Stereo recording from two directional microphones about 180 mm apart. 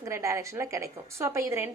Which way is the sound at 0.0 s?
15° right (ahead or behind).